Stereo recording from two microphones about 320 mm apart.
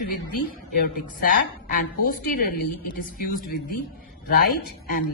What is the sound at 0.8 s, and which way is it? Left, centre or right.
A woman's voice, left.